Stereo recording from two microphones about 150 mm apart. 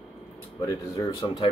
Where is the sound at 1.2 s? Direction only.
25° left (ahead or behind).